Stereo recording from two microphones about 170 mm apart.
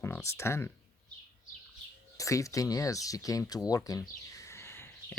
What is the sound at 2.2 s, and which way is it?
Speech, 20° left (ahead or behind).